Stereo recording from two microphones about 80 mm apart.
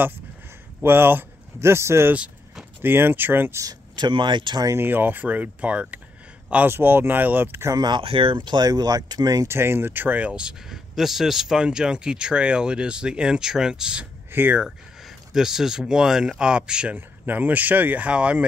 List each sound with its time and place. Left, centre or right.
0.8 s speech: right
2.1 s keys jangling: centre
2.8 s speech: right
3.6 s speech: right
4.7 s speech: right
6.7 s speech: right
7.8 s speech: right
8.6 s speech: right
9.5 s speech: right; by 14.0 s centre
14.3 s speech: right
14.6 s speech: centre